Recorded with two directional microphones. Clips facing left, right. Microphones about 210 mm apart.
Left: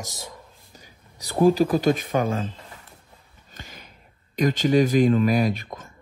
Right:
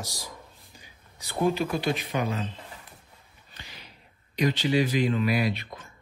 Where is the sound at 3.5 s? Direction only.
45° left (ahead or behind).